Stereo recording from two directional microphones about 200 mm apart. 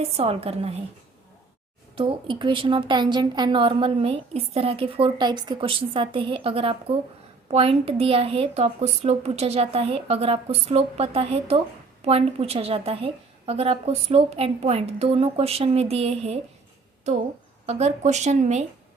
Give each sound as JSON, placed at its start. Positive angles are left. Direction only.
{"t": 0.0, "sound": "a woman's voice", "side_deg": -30}
{"t": 2.0, "sound": "a woman's voice", "side_deg": -25}